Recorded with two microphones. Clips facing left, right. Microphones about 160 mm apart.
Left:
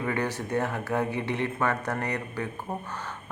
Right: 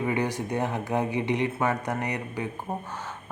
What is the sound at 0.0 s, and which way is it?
Speech, 15° right (ahead or behind).